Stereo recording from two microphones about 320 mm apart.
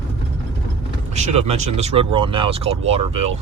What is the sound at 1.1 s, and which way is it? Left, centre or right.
Speech, right.